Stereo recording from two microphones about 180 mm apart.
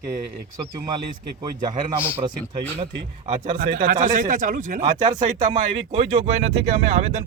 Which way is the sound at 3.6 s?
55° right (ahead or behind).